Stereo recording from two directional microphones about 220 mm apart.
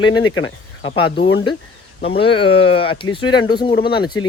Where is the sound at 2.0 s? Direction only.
25° left (ahead or behind).